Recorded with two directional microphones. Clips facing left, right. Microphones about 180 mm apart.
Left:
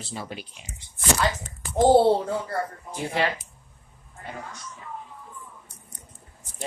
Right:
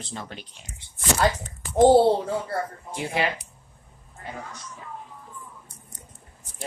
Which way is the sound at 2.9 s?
15° right (ahead or behind).